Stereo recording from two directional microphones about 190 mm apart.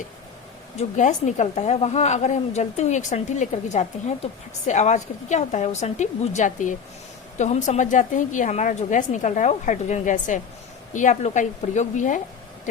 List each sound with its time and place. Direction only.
0.8 s a woman's voice: 40° left (ahead or behind)